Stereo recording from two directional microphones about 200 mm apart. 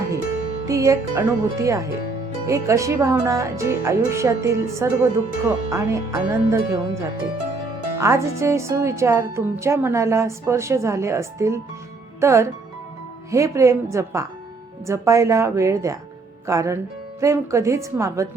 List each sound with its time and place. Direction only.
0.6 s speech: 15° right (ahead or behind)